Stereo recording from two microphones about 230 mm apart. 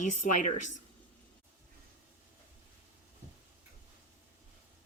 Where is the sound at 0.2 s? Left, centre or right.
Left.